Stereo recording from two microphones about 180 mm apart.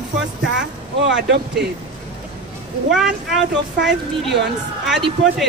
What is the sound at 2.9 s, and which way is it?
Speech, centre (ahead or behind).